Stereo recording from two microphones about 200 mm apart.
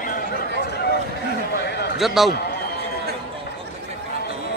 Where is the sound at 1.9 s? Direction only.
Centre (ahead or behind).